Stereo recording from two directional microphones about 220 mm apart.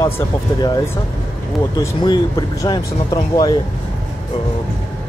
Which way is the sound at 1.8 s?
20° left (ahead or behind).